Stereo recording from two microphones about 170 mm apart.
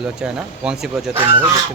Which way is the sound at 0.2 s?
5° right (ahead or behind).